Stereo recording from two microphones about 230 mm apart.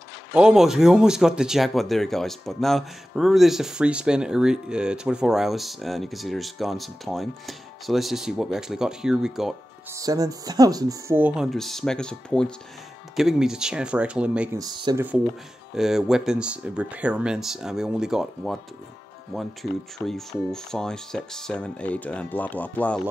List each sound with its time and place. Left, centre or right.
0.3 s speech: centre
9.9 s speech: centre
14.6 s speech: centre
15.7 s speech: centre